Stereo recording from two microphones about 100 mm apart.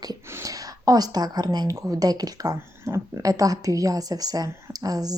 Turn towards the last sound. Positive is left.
turn(degrees=-40)  # may be behind; listen again after turning